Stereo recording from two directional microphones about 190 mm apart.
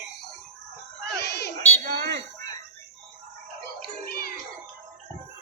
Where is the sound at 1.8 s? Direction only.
50° right (ahead or behind).